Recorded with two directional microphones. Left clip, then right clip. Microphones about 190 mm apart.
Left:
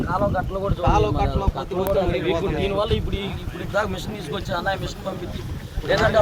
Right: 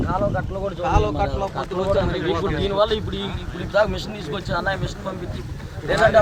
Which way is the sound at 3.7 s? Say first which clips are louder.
Right 5 dB; 20° left (ahead or behind).